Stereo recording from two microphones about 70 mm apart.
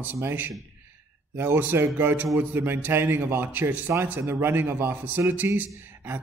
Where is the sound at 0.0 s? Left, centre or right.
Right.